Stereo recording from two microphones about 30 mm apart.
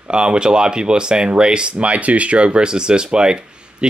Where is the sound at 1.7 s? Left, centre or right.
Right.